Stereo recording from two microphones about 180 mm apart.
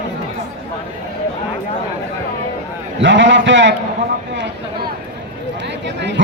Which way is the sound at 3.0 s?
90° right.